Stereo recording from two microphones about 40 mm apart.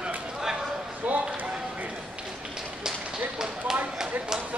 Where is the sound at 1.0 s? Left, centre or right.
Right.